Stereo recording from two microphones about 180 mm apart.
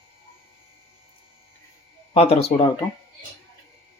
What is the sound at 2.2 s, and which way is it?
Speech, 35° left (ahead or behind).